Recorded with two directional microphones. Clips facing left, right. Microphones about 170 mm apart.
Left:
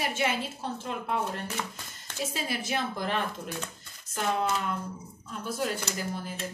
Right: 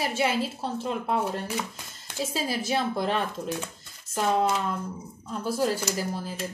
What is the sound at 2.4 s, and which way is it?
Speech, 35° right (ahead or behind).